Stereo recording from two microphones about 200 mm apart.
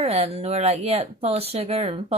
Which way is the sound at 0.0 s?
30° right (ahead or behind).